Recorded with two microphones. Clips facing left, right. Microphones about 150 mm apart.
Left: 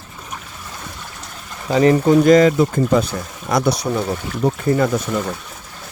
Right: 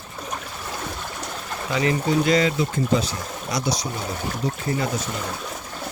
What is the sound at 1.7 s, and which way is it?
Speech, 40° left (ahead or behind).